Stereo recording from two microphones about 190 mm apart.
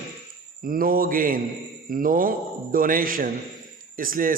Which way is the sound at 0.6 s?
50° right (ahead or behind).